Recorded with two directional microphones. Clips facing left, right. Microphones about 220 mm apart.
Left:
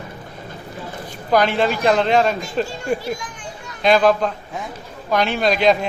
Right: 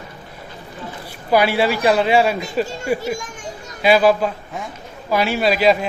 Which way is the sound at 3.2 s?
45° right (ahead or behind).